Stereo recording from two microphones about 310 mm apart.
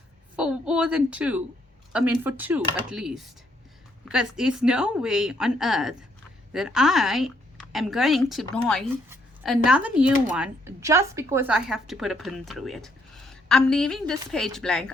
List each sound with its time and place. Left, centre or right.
0.3 s a woman's voice: centre